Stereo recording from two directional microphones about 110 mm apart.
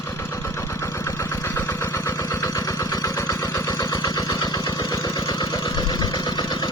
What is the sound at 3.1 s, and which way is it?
Vehicle, 20° left (ahead or behind).